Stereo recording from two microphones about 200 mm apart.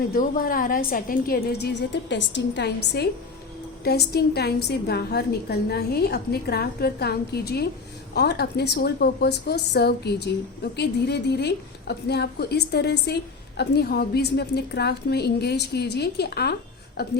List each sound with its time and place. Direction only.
0.1 s a woman's voice: 45° left (ahead or behind)